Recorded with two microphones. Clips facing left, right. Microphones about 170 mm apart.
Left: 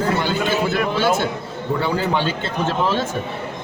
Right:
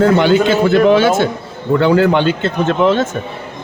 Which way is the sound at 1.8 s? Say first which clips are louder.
Right 10 dB; 75° right (ahead or behind).